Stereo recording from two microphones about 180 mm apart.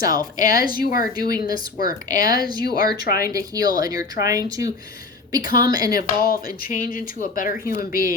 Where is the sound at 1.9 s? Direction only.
20° right (ahead or behind).